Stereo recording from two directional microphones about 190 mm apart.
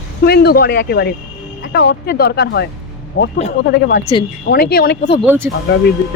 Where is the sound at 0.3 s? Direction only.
55° left (ahead or behind).